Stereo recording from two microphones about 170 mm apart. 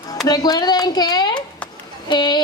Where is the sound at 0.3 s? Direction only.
25° left (ahead or behind).